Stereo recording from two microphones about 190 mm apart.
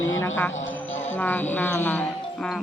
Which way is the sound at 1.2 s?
10° left (ahead or behind).